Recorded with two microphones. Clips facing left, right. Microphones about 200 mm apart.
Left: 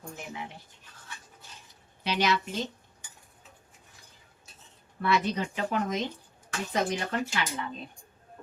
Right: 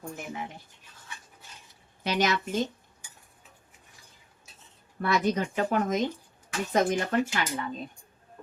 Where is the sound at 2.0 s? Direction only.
45° right (ahead or behind).